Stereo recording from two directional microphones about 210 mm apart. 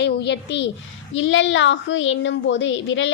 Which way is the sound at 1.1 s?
65° left (ahead or behind).